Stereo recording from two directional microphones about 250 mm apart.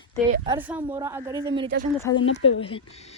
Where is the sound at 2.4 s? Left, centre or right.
Left.